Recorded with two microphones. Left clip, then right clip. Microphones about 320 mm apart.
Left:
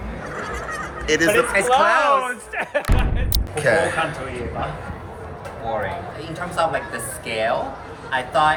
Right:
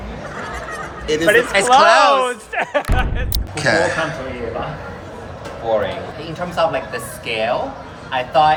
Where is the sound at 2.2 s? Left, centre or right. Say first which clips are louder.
Right 5 dB; right.